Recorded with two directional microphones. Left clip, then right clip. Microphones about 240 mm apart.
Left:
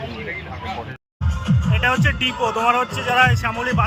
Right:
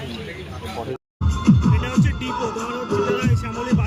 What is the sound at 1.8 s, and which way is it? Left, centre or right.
Speech, centre.